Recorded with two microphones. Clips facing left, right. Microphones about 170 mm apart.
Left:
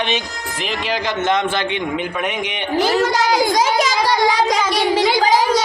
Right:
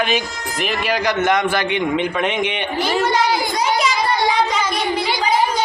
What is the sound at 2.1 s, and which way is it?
Speech, 10° left (ahead or behind).